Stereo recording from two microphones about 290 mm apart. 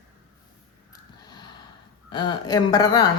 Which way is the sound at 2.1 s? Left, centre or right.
Centre.